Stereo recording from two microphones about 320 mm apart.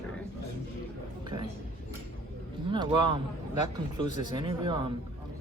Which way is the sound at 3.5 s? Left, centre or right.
Left.